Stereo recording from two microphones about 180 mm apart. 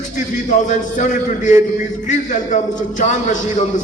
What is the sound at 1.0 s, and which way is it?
A man's voice, 45° left (ahead or behind).